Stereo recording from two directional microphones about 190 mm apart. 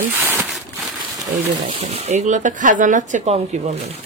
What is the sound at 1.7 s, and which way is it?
Speech, 35° right (ahead or behind).